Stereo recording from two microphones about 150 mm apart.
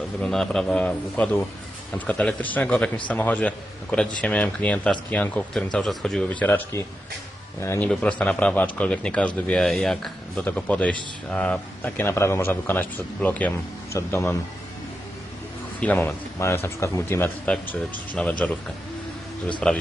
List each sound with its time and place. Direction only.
0.2 s a man's voice: 5° left (ahead or behind)
7.9 s a man's voice: 5° left (ahead or behind)
15.8 s a man's voice: 10° left (ahead or behind)
19.5 s a man's voice: 10° left (ahead or behind)